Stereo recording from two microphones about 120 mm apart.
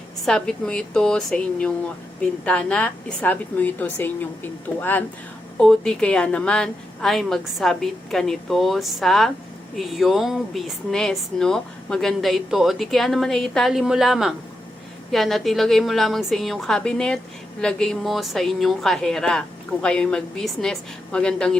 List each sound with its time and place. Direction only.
0.3 s a woman's voice: 5° left (ahead or behind)
5.5 s speech: 5° left (ahead or behind)